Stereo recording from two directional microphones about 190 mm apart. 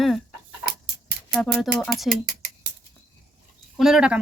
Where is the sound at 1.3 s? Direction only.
Centre (ahead or behind).